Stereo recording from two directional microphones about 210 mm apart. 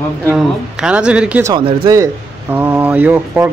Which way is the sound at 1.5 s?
20° right (ahead or behind).